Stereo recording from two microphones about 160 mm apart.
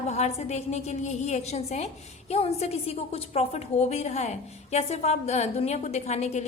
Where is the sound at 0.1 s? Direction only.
45° left (ahead or behind).